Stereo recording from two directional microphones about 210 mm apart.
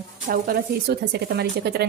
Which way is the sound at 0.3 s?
45° right (ahead or behind).